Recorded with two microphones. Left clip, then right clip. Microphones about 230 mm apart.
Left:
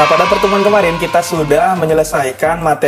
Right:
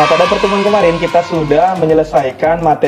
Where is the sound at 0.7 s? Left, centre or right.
Left.